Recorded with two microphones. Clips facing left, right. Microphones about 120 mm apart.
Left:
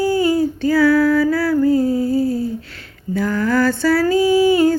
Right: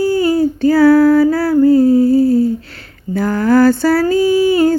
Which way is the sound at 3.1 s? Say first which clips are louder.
Right 5 dB; 40° right (ahead or behind).